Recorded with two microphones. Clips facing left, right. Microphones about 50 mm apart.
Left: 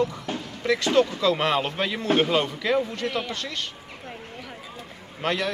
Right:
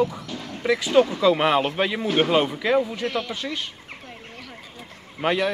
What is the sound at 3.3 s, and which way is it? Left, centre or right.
Speech, centre.